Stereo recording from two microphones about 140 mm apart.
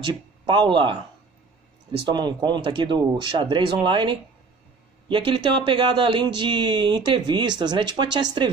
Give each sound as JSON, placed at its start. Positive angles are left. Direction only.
{"t": 0.0, "sound": "speech", "side_deg": -35}